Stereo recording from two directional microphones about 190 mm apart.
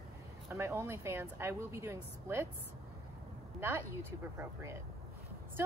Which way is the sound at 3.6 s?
10° right (ahead or behind).